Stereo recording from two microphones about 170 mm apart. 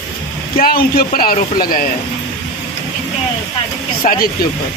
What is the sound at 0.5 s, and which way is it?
Speech, 60° left (ahead or behind).